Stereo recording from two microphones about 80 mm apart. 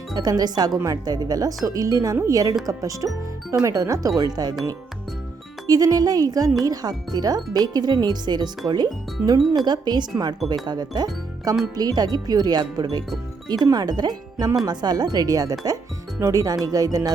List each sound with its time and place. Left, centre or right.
0.1 s speech: right
5.6 s speech: right
9.2 s speech: right
9.6 s speech: right